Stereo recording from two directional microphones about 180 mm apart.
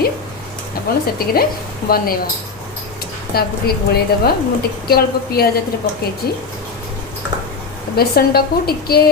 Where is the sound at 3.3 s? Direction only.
60° left (ahead or behind).